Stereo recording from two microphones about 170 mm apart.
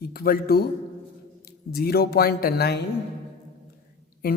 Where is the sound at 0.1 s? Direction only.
65° left (ahead or behind).